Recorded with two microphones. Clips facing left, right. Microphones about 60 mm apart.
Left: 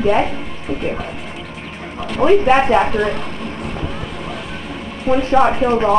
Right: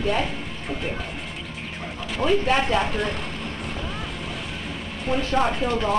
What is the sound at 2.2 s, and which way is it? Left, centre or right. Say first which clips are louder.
Speech: left 9 dB; left.